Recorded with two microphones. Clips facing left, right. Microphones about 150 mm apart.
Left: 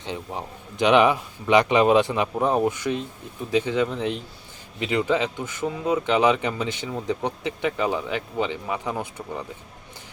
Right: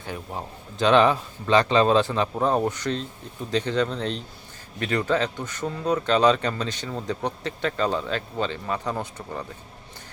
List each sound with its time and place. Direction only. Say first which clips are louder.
0.0 s speech: left 2 dB; 20° left (ahead or behind)